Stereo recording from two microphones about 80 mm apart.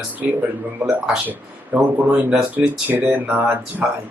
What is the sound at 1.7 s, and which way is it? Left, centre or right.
Speech, centre.